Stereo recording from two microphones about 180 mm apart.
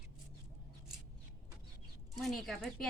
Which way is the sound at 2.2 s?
Centre (ahead or behind).